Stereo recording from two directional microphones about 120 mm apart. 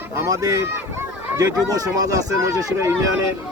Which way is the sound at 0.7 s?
20° right (ahead or behind).